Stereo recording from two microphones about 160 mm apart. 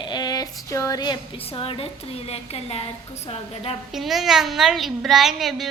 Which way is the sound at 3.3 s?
35° left (ahead or behind).